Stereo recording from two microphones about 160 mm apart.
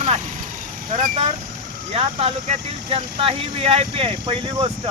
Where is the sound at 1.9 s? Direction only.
35° right (ahead or behind).